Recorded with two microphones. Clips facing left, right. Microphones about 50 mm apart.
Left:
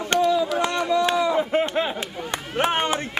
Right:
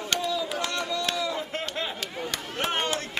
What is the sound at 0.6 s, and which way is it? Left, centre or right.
Chop, left.